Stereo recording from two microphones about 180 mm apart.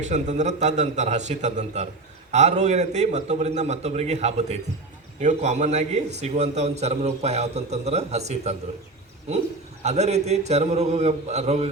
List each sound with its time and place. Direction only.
0.0 s a man's voice: 40° right (ahead or behind)
9.8 s a man's voice: 35° right (ahead or behind)